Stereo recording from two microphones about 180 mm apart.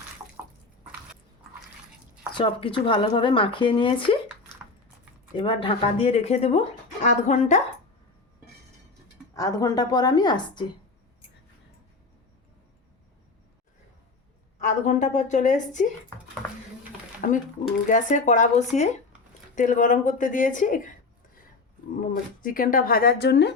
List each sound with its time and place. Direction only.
2.3 s speech: 30° left (ahead or behind)
5.4 s speech: 30° left (ahead or behind)
9.3 s speech: 20° left (ahead or behind)
14.6 s speech: 45° left (ahead or behind)
17.2 s speech: 45° left (ahead or behind)
22.1 s speech: 50° left (ahead or behind); by 23.6 s 70° left (ahead or behind)